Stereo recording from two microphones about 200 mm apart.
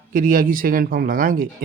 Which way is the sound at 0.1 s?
40° right (ahead or behind).